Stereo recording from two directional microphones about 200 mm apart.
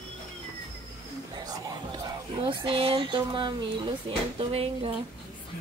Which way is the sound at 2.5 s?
25° right (ahead or behind).